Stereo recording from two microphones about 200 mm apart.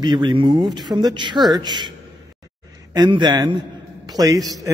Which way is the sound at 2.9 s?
20° right (ahead or behind).